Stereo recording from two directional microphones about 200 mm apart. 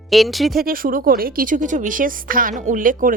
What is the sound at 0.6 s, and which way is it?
Speech, 45° right (ahead or behind).